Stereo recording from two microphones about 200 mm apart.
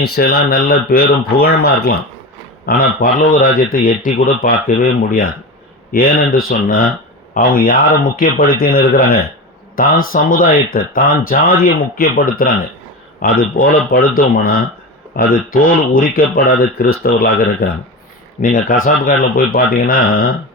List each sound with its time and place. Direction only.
0.2 s speech: 50° left (ahead or behind)